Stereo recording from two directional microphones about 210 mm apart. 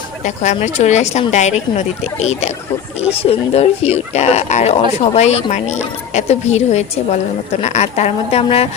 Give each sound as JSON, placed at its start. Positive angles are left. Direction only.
{"t": 0.4, "sound": "speech", "side_deg": 35}